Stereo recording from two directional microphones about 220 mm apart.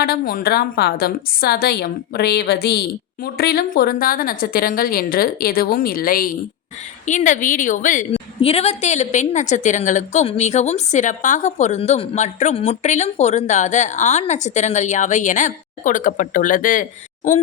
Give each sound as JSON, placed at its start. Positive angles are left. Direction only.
{"t": 0.0, "sound": "a woman's voice", "side_deg": 40}